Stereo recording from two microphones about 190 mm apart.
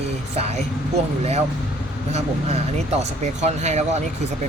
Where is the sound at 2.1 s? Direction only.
35° right (ahead or behind).